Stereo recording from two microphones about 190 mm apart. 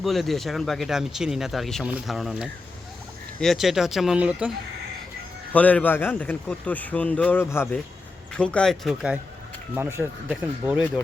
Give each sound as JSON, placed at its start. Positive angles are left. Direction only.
{"t": 0.0, "sound": "speech", "side_deg": 0}
{"t": 5.5, "sound": "a man's voice", "side_deg": 10}